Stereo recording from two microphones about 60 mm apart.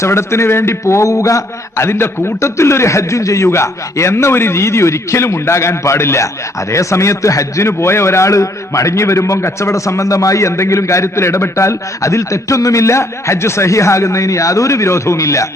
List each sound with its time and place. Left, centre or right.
0.0 s a man's voice: left
7.7 s a man's voice: left